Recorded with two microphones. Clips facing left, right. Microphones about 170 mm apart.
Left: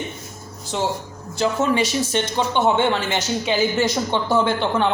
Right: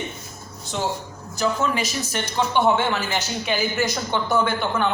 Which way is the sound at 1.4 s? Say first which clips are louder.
Left 3 dB; 30° left (ahead or behind).